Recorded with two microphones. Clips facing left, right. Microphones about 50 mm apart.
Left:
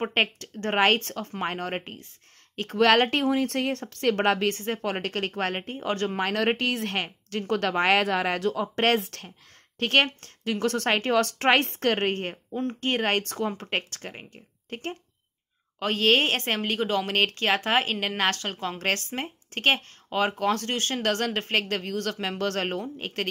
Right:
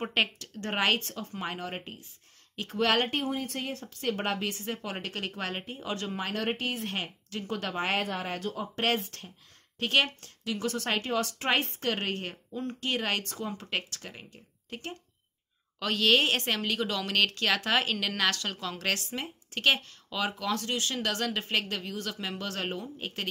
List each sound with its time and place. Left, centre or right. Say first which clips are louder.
0.1 s a woman's voice: left 3 dB; left
7.0 s speech: left 6 dB; left
8.7 s speech: left 3 dB; left
9.8 s a woman's voice: left 4 dB; left